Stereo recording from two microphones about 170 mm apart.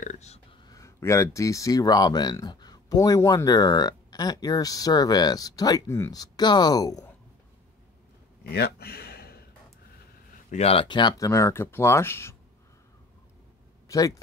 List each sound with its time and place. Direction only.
0.0 s a sound: 45° left (ahead or behind)
0.7 s speech: 20° left (ahead or behind)
8.5 s speech: 65° left (ahead or behind)
10.5 s speech: 35° left (ahead or behind); by 12.4 s 15° left (ahead or behind)
13.8 s speech: 20° left (ahead or behind)